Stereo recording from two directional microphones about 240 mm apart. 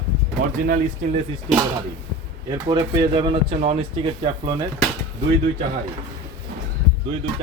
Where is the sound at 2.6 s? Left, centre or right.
Right.